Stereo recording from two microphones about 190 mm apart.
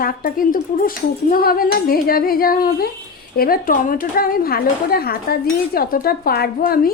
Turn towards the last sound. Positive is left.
turn(degrees=50)  # may be behind; listen again after turning